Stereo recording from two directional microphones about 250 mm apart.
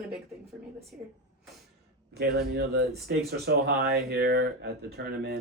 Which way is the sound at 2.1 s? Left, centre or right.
Right.